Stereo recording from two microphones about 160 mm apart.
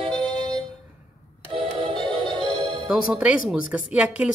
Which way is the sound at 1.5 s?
35° right (ahead or behind).